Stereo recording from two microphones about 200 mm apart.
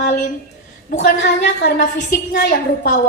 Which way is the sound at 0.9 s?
45° left (ahead or behind).